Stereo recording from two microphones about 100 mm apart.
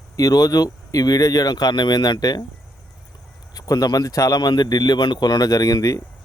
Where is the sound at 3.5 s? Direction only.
40° left (ahead or behind).